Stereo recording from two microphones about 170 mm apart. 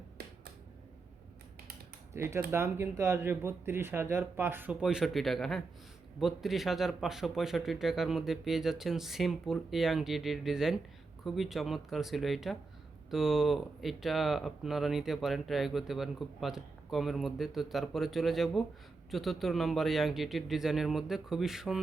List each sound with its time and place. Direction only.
2.1 s speech: 15° right (ahead or behind)